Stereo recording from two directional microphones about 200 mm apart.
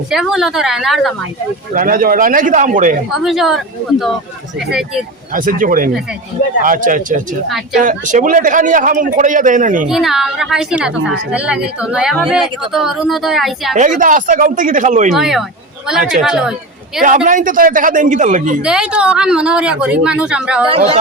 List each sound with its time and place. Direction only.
0.1 s a woman's voice: centre (ahead or behind)
1.7 s a man's voice: 45° right (ahead or behind)
3.1 s a woman's voice: centre (ahead or behind)
5.3 s a man's voice: 45° right (ahead or behind)
9.8 s a woman's voice: centre (ahead or behind)
13.7 s a man's voice: 40° right (ahead or behind)
15.1 s a woman's voice: centre (ahead or behind)
17.2 s a man's voice: 40° right (ahead or behind)
18.6 s a woman's voice: 5° right (ahead or behind)
20.7 s speech: 30° right (ahead or behind)